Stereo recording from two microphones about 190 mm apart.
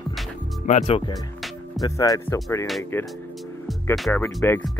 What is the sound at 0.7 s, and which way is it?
Speech, 35° left (ahead or behind).